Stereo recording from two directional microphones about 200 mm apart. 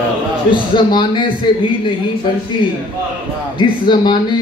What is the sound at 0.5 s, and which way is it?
Speech, 25° left (ahead or behind).